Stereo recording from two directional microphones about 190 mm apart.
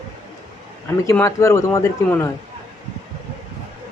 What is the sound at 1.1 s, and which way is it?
Speech, 15° left (ahead or behind).